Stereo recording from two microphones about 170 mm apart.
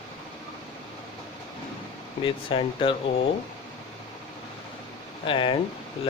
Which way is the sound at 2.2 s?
30° left (ahead or behind).